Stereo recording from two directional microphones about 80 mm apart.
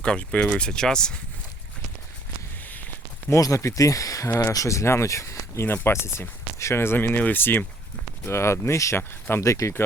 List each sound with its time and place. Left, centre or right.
0.0 s speech: centre
3.2 s speech: left